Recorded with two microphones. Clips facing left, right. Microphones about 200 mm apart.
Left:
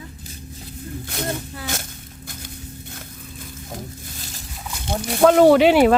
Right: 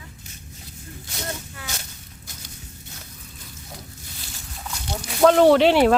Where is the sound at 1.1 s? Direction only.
55° left (ahead or behind).